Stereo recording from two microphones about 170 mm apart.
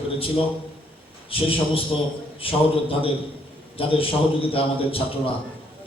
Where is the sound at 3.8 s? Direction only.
30° left (ahead or behind).